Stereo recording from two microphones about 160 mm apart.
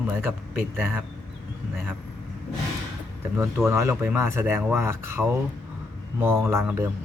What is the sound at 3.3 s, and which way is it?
A man's voice, 15° right (ahead or behind).